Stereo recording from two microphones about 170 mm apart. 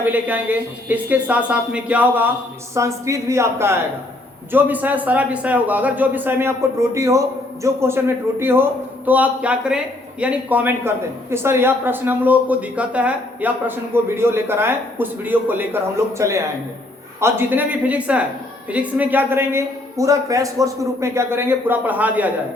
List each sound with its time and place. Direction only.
0.0 s a man's voice: 10° right (ahead or behind)